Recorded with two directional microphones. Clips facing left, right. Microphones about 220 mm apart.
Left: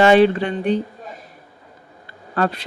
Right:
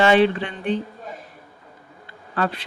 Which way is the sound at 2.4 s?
40° left (ahead or behind).